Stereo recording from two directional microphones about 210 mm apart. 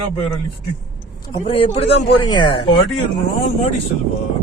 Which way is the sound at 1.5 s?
25° left (ahead or behind).